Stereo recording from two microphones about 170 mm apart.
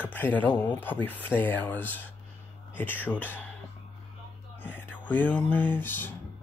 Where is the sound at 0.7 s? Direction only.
10° left (ahead or behind).